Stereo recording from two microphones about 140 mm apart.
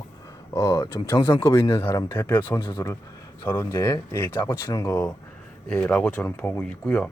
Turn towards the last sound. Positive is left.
turn(degrees=10)  # may be behind; listen again after turning